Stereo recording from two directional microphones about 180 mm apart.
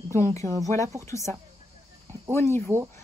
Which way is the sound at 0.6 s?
15° left (ahead or behind).